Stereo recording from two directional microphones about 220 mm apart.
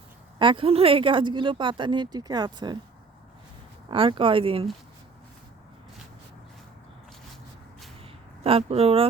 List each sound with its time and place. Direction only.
0.3 s speech: 20° right (ahead or behind)
3.8 s speech: 25° right (ahead or behind)
8.4 s speech: 25° right (ahead or behind)